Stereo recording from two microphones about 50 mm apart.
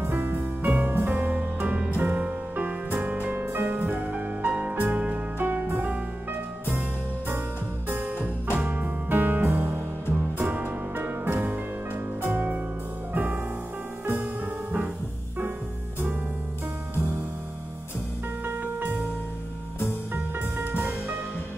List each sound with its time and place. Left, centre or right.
0.0 s music: right
8.6 s music: right
18.4 s music: right
20.7 s music: right